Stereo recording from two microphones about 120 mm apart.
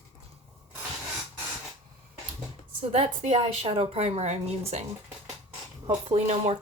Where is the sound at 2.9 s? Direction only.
60° right (ahead or behind).